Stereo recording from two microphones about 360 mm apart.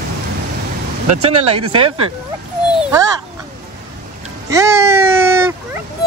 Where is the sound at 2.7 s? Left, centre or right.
Centre.